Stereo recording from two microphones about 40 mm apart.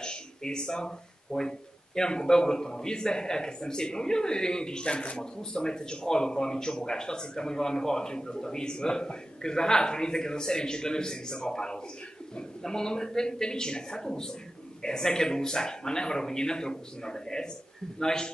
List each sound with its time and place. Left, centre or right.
0.0 s a sound: centre
2.0 s a man's voice: centre
4.9 s speech: left
5.2 s a man's voice: centre